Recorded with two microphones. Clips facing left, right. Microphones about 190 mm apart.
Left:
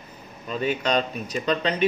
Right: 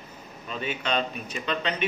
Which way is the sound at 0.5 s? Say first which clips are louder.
Left 5 dB; 40° left (ahead or behind).